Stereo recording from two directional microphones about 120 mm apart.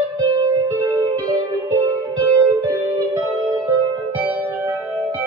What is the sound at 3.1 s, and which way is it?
Music, 40° right (ahead or behind).